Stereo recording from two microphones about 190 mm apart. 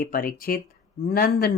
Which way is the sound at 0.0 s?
50° left (ahead or behind).